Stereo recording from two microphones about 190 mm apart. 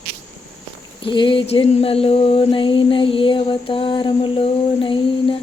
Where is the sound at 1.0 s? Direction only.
25° left (ahead or behind).